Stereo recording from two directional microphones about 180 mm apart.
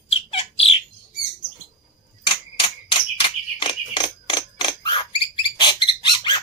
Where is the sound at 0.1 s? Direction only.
30° left (ahead or behind).